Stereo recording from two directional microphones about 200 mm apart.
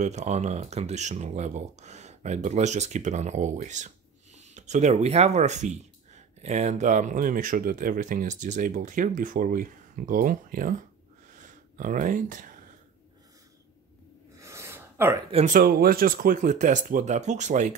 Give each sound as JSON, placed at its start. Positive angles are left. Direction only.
{"t": 0.0, "sound": "speech", "side_deg": -35}
{"t": 14.4, "sound": "a sound", "side_deg": -15}
{"t": 15.3, "sound": "speech", "side_deg": -40}